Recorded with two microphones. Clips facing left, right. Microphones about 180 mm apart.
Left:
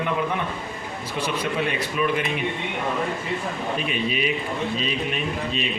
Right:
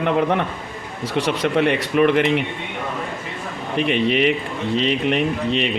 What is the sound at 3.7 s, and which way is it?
A man's voice, 70° right (ahead or behind).